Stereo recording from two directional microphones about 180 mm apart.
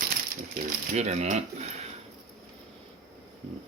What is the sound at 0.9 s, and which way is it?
Speech, 40° right (ahead or behind).